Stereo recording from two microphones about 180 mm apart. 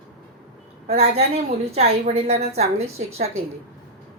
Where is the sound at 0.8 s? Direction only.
35° right (ahead or behind).